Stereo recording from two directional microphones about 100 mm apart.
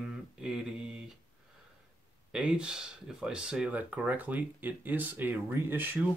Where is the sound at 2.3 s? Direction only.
10° right (ahead or behind).